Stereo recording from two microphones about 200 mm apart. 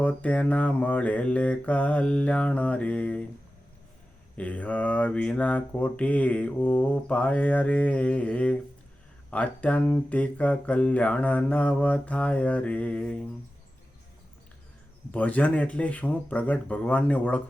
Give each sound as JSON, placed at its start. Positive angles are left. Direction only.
{"t": 0.0, "sound": "speech", "side_deg": 5}
{"t": 4.4, "sound": "speech", "side_deg": 5}
{"t": 15.1, "sound": "speech", "side_deg": 5}